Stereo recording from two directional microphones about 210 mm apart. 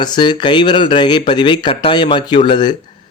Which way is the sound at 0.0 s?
20° left (ahead or behind).